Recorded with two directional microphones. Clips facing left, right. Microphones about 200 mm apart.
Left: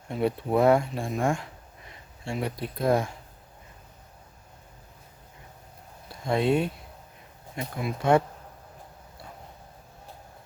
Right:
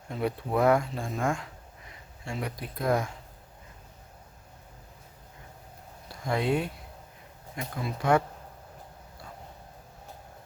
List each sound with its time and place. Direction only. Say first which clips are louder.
0.1 s speech: left 4 dB; 25° left (ahead or behind)
6.2 s speech: left 4 dB; 25° left (ahead or behind)